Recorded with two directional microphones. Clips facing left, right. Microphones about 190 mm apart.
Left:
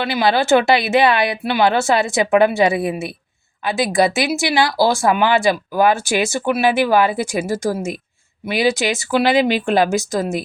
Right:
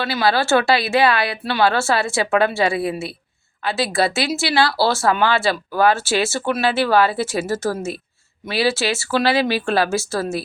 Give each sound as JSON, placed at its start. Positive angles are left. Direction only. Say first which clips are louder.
{"t": 0.0, "sound": "speech", "louder": "left 2 dB", "side_deg": 20}